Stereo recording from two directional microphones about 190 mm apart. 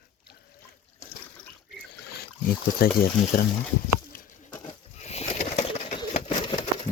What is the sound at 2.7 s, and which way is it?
Speech, 50° left (ahead or behind).